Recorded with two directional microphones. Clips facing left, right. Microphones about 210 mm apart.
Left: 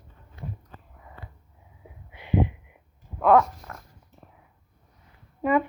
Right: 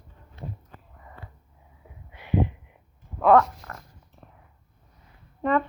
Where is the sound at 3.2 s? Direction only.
Centre (ahead or behind).